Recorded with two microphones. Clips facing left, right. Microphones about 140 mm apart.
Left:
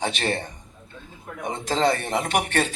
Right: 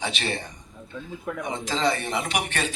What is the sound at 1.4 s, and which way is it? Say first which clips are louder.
A man's voice: left 3 dB; 50° left (ahead or behind).